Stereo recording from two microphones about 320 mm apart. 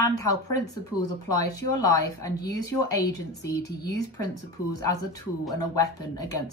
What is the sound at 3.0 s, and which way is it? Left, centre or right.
Speech, left.